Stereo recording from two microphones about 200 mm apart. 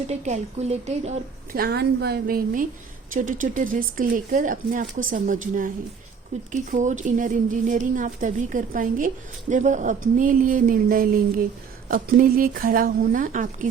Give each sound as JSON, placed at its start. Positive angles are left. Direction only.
{"t": 0.1, "sound": "a woman's voice", "side_deg": -35}
{"t": 1.5, "sound": "a woman's voice", "side_deg": -55}